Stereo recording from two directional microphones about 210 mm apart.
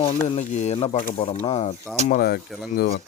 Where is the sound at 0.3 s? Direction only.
30° left (ahead or behind).